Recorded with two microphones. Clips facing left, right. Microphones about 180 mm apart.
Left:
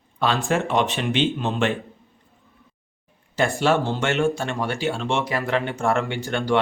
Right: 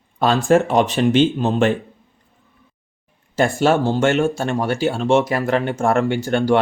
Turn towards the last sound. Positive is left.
turn(degrees=-40)  # may be behind; listen again after turning